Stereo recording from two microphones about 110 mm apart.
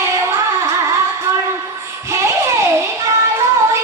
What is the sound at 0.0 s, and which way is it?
Music, 30° right (ahead or behind).